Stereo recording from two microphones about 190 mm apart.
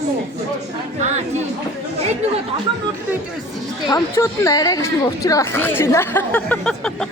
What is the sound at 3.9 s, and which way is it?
Speech, 20° left (ahead or behind).